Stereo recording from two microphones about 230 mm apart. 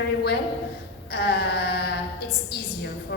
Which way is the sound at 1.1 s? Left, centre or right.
Left.